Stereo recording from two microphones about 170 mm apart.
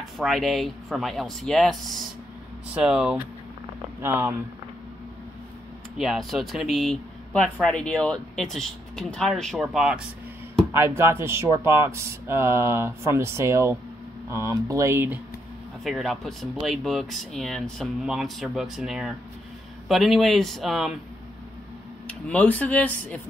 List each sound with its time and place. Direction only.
0.0 s speech: centre (ahead or behind)
5.9 s speech: centre (ahead or behind)
10.7 s speech: 15° right (ahead or behind)
15.8 s speech: centre (ahead or behind)
22.0 s speech: 10° left (ahead or behind)